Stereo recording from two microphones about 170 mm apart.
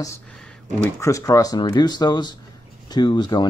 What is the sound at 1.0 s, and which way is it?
Speech, 20° left (ahead or behind).